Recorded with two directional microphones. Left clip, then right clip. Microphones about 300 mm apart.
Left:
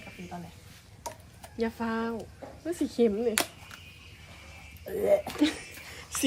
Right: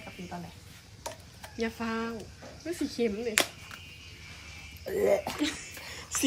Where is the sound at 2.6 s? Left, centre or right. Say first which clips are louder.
Left 4 dB; centre.